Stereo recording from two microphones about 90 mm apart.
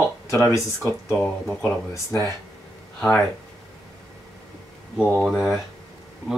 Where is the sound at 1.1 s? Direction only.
10° left (ahead or behind).